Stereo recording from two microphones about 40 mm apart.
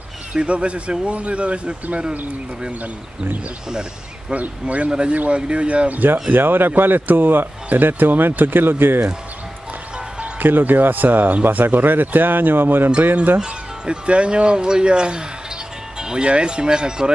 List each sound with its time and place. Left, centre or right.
0.3 s speech: right
4.3 s speech: right
6.3 s a man's voice: right
10.4 s a man's voice: right
13.0 s speech: right
13.4 s speech: right
16.0 s music: centre
16.3 s speech: right